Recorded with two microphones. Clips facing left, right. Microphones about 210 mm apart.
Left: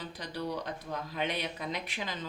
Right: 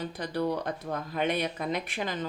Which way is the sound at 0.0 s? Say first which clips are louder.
Right 7 dB; 50° right (ahead or behind).